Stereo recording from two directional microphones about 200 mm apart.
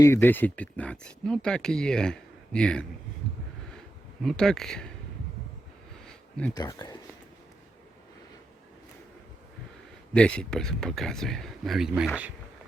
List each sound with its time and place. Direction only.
0.0 s speech: 10° left (ahead or behind)
4.2 s speech: centre (ahead or behind)
6.1 s a sound: 5° left (ahead or behind)
6.5 s speech: 20° left (ahead or behind)
10.2 s speech: 5° left (ahead or behind)